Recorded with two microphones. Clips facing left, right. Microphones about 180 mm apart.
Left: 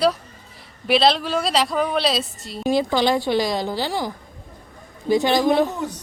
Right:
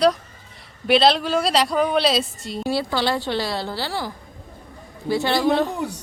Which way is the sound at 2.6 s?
15° left (ahead or behind).